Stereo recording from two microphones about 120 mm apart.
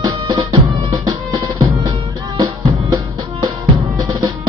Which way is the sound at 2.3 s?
35° right (ahead or behind).